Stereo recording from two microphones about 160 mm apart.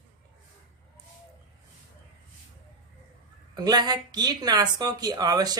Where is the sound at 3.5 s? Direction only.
25° right (ahead or behind).